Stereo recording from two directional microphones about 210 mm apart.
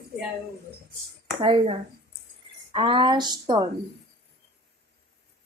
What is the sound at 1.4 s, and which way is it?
A woman's voice, 25° right (ahead or behind).